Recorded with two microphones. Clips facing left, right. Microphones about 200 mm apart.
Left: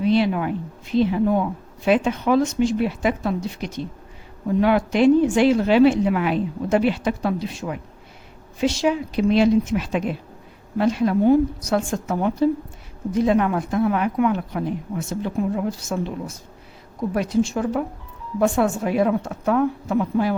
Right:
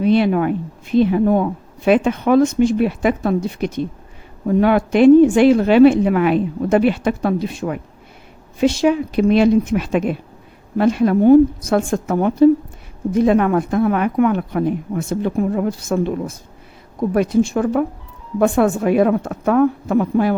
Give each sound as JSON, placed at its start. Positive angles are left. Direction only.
{"t": 0.0, "sound": "speech", "side_deg": -55}